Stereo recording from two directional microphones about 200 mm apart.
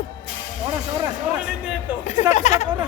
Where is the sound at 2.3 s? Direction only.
35° left (ahead or behind).